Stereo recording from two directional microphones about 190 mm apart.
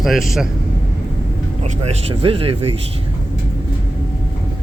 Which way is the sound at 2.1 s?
30° right (ahead or behind).